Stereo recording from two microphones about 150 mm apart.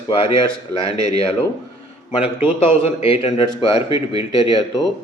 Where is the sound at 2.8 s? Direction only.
40° left (ahead or behind).